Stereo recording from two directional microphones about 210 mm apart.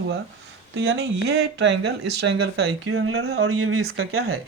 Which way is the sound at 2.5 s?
80° right.